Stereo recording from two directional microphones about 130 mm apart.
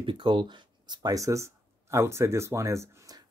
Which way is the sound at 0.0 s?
40° right (ahead or behind).